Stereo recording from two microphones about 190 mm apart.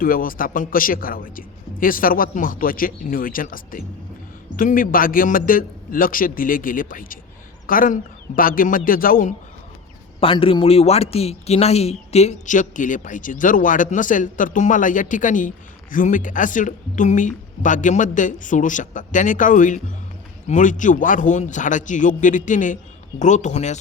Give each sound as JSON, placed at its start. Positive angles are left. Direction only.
{"t": 0.0, "sound": "a man's voice", "side_deg": 50}
{"t": 10.2, "sound": "speech", "side_deg": 30}